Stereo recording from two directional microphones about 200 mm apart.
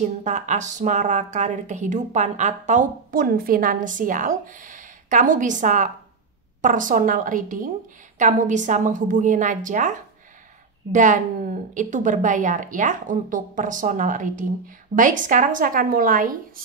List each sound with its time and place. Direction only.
0.0 s a woman's voice: 35° right (ahead or behind)